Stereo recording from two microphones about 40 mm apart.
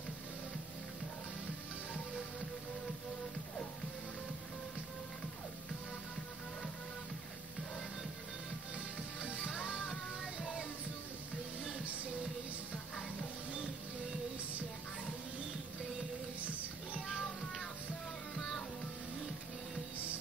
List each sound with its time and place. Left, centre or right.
8.7 s music: right
9.7 s music: centre
11.8 s music: right
12.7 s music: left
16.3 s music: right
17.0 s music: centre